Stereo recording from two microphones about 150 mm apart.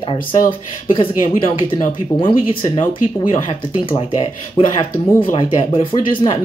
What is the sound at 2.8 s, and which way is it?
Speech, 60° left (ahead or behind).